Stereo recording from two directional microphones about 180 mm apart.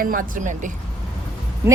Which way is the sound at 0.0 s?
50° right (ahead or behind).